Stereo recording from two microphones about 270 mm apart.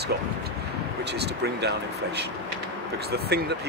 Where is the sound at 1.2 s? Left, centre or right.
Right.